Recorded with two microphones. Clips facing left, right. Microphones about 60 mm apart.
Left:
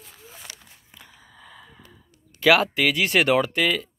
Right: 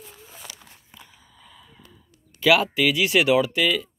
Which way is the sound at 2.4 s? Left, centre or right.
Left.